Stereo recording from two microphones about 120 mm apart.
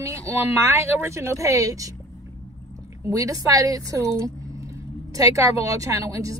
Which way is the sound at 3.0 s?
30° right (ahead or behind).